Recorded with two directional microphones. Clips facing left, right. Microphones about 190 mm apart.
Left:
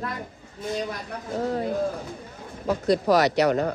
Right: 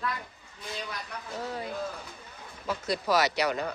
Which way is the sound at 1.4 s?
45° left (ahead or behind).